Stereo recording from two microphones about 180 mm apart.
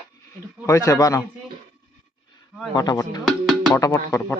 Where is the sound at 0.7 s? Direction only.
15° left (ahead or behind).